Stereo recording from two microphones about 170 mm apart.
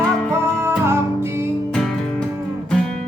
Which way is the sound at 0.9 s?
15° right (ahead or behind).